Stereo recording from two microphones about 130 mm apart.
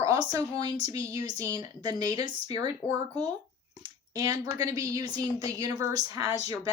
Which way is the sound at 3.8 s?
30° right (ahead or behind).